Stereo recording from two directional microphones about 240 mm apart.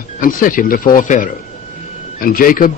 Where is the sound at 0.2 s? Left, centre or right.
Left.